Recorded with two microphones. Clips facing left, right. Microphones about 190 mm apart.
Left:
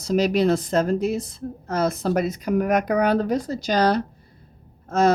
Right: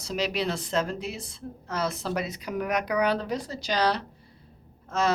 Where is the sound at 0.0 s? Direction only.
45° left (ahead or behind).